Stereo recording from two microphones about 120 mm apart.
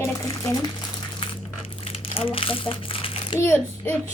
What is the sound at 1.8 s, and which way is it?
Crumpling, 50° left (ahead or behind).